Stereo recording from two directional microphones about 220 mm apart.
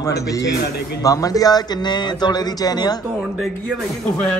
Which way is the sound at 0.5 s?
50° left (ahead or behind).